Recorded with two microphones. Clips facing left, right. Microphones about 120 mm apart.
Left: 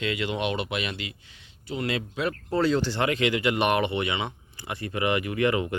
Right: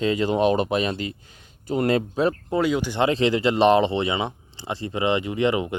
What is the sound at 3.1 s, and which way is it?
Speech, 30° right (ahead or behind).